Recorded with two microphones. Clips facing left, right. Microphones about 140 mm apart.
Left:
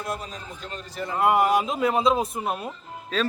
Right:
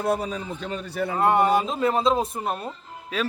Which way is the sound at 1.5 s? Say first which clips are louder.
Right 1 dB; 30° right (ahead or behind).